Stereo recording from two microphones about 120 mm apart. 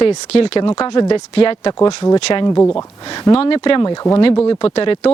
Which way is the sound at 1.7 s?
30° left (ahead or behind).